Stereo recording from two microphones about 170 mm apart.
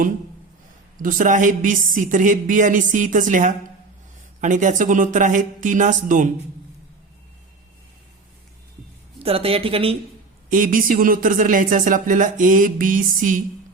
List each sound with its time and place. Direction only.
0.9 s speech: 50° right (ahead or behind)
9.1 s speech: 35° right (ahead or behind)
10.5 s speech: 55° right (ahead or behind)